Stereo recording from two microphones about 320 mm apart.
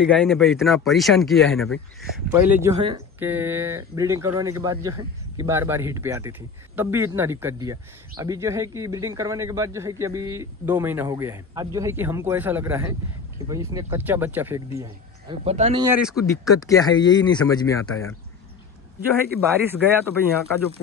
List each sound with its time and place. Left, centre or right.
0.0 s a man's voice: centre
16.6 s speech: centre
18.9 s a man's voice: centre